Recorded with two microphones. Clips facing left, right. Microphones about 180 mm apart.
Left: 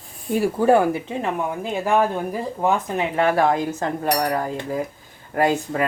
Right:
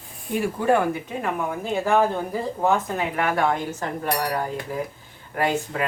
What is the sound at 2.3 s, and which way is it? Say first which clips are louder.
Speech: even; 15° left (ahead or behind).